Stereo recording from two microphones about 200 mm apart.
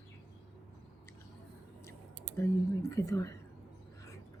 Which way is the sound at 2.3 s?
15° left (ahead or behind).